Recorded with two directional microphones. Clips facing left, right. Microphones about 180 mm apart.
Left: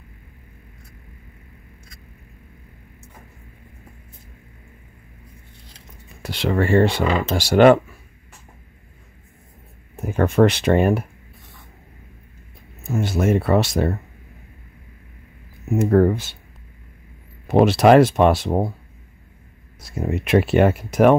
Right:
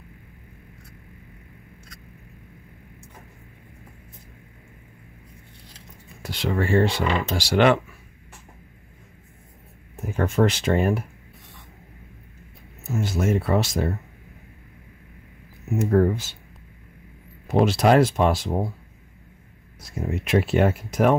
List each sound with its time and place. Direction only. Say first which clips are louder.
6.2 s speech: left 4 dB; 65° left (ahead or behind); by 7.8 s 45° left (ahead or behind)
10.0 s speech: left 5 dB; 60° left (ahead or behind)
12.8 s speech: left 4 dB; 60° left (ahead or behind)
15.7 s speech: left 4 dB; 60° left (ahead or behind)
17.5 s speech: left 5 dB; 60° left (ahead or behind)
19.8 s speech: left 4 dB; 65° left (ahead or behind)